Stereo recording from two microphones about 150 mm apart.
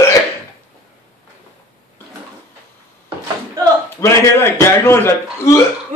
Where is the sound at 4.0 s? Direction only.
15° left (ahead or behind).